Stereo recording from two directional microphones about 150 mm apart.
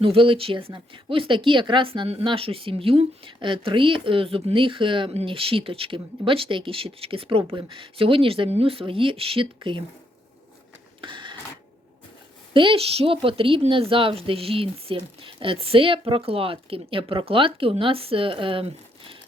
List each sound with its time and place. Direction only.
0.0 s speech: 35° right (ahead or behind)
11.0 s printer: 35° right (ahead or behind)
12.5 s speech: 35° right (ahead or behind)